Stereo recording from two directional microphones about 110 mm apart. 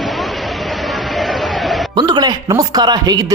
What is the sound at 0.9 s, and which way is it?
Music, centre (ahead or behind).